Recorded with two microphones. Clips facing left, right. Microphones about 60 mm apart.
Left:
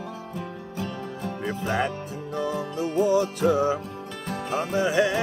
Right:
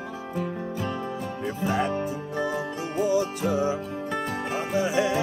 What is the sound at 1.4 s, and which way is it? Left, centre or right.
Music, left.